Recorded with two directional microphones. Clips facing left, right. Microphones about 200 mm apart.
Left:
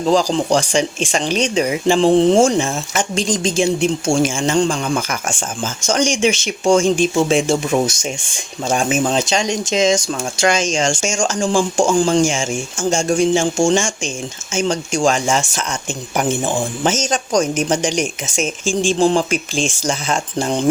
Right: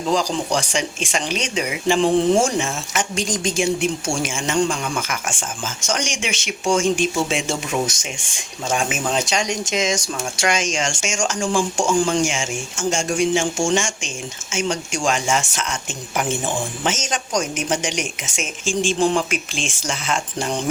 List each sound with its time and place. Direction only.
0.1 s speech: 30° left (ahead or behind)
16.8 s speech: 35° left (ahead or behind)
18.9 s speech: 30° left (ahead or behind)